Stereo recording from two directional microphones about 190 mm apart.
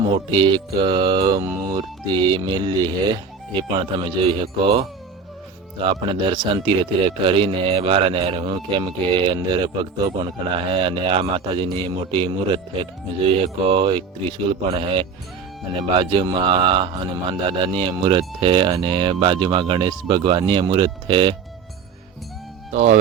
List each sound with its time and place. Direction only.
0.3 s speech: 25° right (ahead or behind)
22.7 s speech: 35° right (ahead or behind)